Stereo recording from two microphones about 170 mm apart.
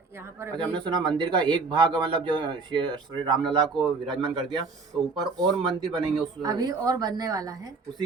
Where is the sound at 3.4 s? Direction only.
Centre (ahead or behind).